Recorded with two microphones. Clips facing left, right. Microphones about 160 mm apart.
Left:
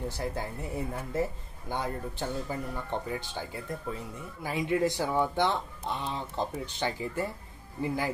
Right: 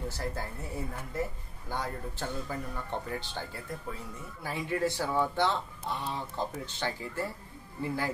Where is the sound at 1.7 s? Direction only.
20° left (ahead or behind).